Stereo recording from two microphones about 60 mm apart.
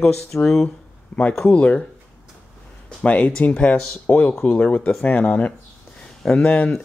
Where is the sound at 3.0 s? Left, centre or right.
Centre.